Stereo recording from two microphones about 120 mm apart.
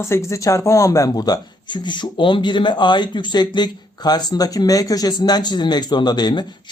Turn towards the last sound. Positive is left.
turn(degrees=35)  # may be behind; listen again after turning